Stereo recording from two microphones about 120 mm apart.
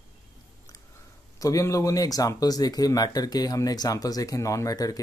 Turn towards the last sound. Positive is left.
turn(degrees=30)  # may be behind; listen again after turning